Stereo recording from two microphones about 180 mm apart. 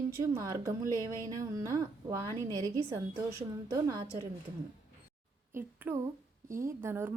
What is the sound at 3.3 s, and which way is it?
Speech, 20° right (ahead or behind).